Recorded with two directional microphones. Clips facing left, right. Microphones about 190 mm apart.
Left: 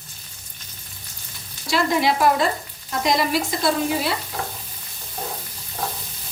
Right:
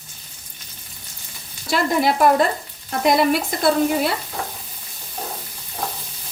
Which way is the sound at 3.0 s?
55° right (ahead or behind).